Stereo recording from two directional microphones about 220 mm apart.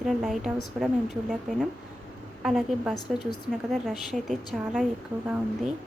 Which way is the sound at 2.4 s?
Centre (ahead or behind).